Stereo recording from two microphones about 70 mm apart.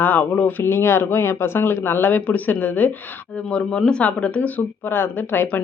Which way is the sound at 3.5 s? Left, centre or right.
Centre.